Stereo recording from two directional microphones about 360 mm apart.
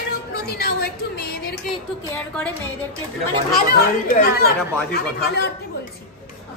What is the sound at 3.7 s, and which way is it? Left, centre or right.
Speech, left.